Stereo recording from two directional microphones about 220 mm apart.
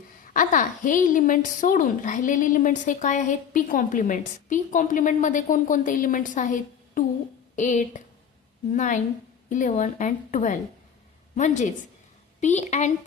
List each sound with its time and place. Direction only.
0.3 s a woman's voice: 35° left (ahead or behind)